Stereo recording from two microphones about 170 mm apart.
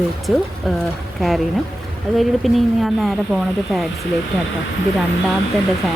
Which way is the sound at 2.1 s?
Centre (ahead or behind).